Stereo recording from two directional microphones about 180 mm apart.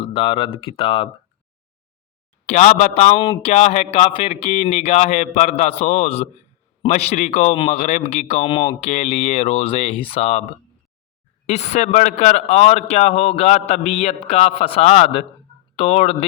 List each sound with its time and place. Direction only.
0.0 s speech: 30° left (ahead or behind)
2.5 s a man's voice: 45° left (ahead or behind)
3.2 s speech: 25° left (ahead or behind)
3.5 s a man's voice: 40° left (ahead or behind)
11.4 s a man's voice: 40° left (ahead or behind)